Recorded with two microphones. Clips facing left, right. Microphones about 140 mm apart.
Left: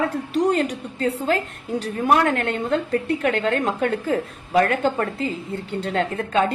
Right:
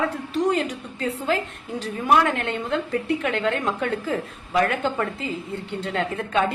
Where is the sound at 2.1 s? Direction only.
45° left (ahead or behind).